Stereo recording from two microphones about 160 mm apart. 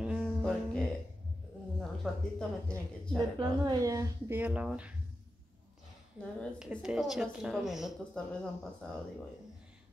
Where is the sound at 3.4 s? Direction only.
20° right (ahead or behind).